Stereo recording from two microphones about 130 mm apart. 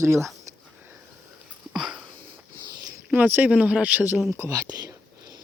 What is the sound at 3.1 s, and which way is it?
Speech, 15° right (ahead or behind).